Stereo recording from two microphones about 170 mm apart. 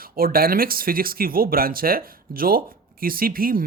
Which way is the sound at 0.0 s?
60° right (ahead or behind).